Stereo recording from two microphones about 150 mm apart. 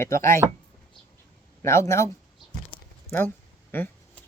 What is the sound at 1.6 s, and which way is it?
Speech, 20° left (ahead or behind).